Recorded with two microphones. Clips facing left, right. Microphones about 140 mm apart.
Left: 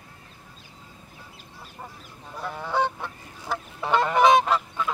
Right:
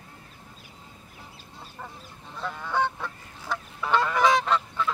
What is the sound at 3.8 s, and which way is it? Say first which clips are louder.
Goose: left 3 dB; 25° left (ahead or behind).